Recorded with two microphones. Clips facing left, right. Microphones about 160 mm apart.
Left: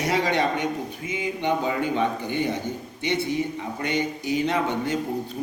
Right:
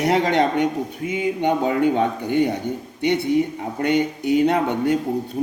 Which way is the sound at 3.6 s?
60° right (ahead or behind).